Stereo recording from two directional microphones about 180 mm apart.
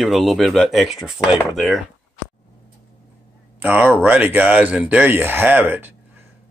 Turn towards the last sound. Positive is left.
turn(degrees=-10)  # may be behind; listen again after turning